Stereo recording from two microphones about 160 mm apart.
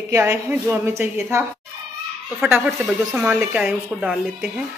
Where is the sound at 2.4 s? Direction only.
10° right (ahead or behind).